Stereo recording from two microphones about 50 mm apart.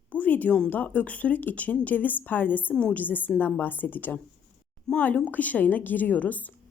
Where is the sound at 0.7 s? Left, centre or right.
Left.